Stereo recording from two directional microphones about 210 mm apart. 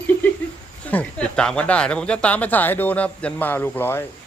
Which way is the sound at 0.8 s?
5° left (ahead or behind).